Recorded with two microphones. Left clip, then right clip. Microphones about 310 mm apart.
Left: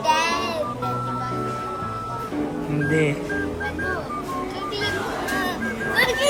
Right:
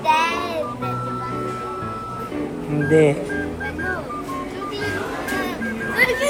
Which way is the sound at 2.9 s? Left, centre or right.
Centre.